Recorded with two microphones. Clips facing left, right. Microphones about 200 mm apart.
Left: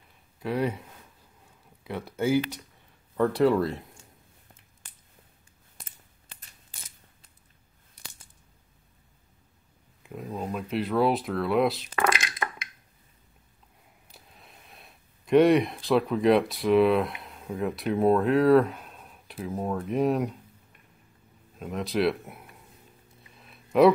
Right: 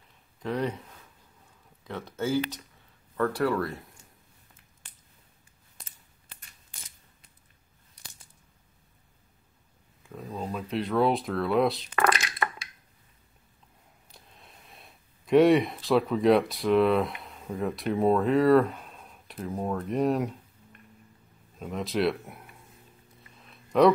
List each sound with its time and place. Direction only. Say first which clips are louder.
0.4 s speech: left 2 dB; 10° left (ahead or behind)
1.9 s speech: left 3 dB; 10° left (ahead or behind)
10.2 s speech: left 1 dB; centre (ahead or behind)
14.1 s speech: left 1 dB; centre (ahead or behind)
21.5 s speech: left 1 dB; centre (ahead or behind)
23.4 s a sound: left 1 dB; 5° left (ahead or behind)